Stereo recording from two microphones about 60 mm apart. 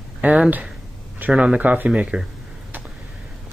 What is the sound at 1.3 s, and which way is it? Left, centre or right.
Speech, centre.